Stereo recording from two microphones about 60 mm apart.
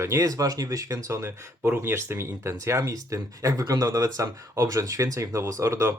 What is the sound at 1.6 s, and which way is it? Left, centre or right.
Speech, right.